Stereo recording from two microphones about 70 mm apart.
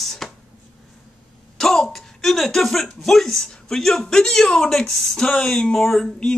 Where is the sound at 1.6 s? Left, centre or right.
Centre.